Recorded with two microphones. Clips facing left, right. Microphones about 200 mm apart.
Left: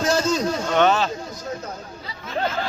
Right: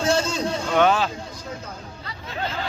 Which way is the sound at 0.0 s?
30° right (ahead or behind).